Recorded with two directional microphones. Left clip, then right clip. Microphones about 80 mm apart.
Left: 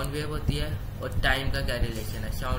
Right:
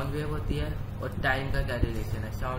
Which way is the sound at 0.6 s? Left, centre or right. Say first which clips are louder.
Left 1 dB; centre.